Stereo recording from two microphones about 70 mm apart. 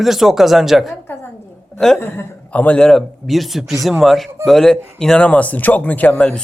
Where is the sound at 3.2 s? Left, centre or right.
Centre.